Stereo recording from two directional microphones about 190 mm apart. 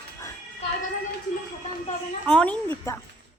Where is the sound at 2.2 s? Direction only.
5° left (ahead or behind).